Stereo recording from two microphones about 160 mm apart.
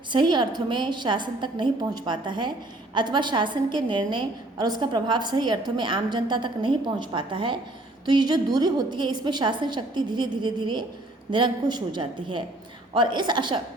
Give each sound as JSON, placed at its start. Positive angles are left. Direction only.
{"t": 0.1, "sound": "a woman's voice", "side_deg": -30}